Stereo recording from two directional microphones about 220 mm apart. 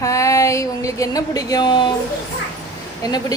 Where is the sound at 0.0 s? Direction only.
15° left (ahead or behind).